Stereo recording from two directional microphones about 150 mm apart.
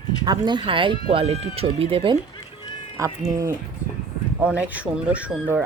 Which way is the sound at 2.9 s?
20° right (ahead or behind).